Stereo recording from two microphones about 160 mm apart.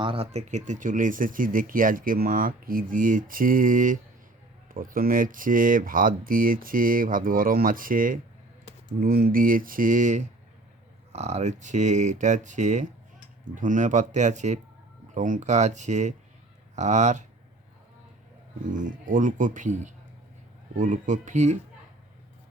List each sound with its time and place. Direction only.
0.0 s speech: 35° right (ahead or behind)
18.7 s speech: 55° right (ahead or behind)